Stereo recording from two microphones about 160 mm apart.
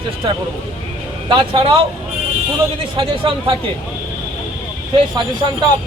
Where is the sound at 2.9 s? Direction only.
35° right (ahead or behind).